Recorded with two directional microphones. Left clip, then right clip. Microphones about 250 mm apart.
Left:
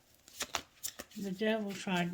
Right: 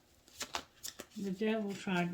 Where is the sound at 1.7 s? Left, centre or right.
Left.